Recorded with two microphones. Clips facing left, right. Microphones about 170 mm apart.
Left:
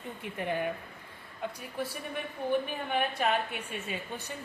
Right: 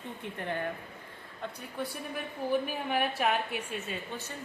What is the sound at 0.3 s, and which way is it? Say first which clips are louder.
Speech: left 3 dB; 10° left (ahead or behind).